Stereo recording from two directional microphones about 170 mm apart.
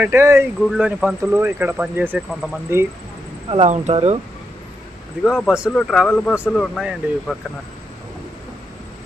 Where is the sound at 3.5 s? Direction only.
40° right (ahead or behind).